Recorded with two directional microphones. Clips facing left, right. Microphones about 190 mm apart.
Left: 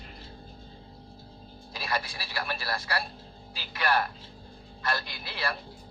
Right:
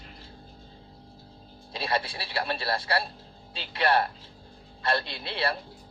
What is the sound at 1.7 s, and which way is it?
A man's voice, 25° right (ahead or behind).